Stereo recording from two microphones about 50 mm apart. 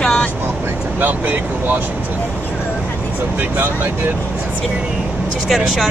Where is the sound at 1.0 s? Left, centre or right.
Right.